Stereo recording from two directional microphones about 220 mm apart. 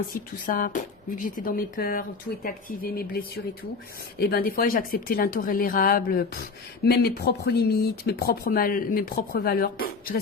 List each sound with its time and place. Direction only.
0.1 s speech: 40° left (ahead or behind)